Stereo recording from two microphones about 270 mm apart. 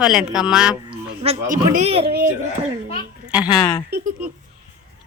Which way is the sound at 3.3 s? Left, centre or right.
Centre.